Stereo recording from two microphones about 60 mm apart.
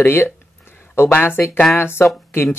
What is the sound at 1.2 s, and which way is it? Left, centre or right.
Speech, left.